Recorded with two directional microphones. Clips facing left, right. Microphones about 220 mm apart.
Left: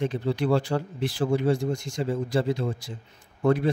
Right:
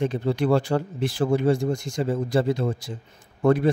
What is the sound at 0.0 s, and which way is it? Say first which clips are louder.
A man's voice: right 3 dB; 50° right (ahead or behind).